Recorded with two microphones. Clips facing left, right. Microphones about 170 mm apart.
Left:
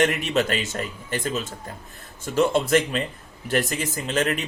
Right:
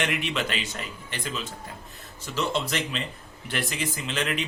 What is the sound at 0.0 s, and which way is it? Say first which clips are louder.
Speech: left 7 dB; 45° left (ahead or behind).